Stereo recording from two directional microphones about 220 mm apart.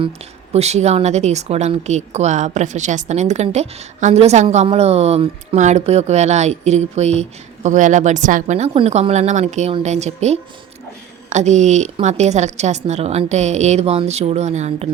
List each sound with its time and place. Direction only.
0.5 s a woman's voice: 30° right (ahead or behind)